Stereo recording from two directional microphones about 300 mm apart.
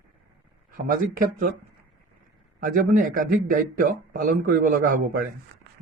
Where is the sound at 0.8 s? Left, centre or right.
Right.